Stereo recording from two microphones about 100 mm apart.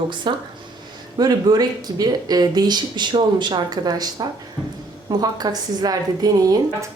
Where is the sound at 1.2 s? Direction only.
45° right (ahead or behind).